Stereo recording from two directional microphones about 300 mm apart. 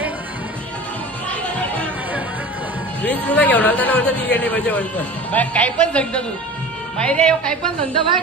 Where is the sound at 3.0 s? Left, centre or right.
Centre.